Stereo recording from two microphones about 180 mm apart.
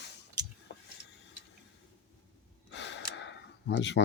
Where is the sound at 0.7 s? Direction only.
75° left (ahead or behind).